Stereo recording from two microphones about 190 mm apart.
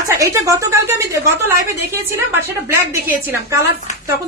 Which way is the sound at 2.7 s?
15° right (ahead or behind).